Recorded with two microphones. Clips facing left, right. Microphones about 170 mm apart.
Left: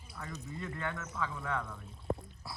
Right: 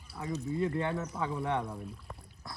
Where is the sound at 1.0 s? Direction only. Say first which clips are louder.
Right 5 dB; 30° right (ahead or behind).